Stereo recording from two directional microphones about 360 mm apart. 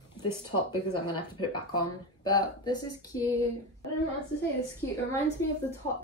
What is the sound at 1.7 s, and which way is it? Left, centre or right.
A woman's voice, centre.